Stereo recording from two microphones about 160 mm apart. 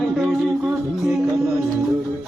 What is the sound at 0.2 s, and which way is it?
Music, centre (ahead or behind).